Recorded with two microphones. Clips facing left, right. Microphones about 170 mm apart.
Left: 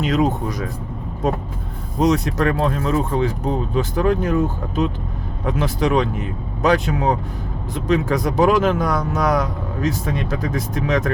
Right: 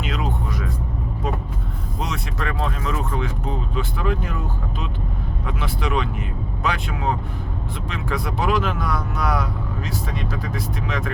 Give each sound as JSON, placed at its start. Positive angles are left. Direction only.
{"t": 0.0, "sound": "a sound", "side_deg": 40}
{"t": 2.0, "sound": "speech", "side_deg": 40}
{"t": 5.5, "sound": "speech", "side_deg": 40}